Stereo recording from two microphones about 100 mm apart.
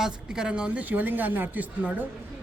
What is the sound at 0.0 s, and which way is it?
Speech, 5° right (ahead or behind).